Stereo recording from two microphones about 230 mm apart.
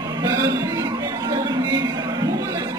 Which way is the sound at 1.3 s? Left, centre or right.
Centre.